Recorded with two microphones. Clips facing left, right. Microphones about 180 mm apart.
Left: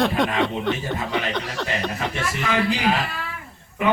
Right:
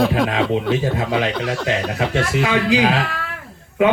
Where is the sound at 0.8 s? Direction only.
90° right.